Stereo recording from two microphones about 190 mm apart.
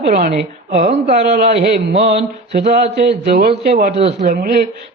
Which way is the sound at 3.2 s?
55° right (ahead or behind).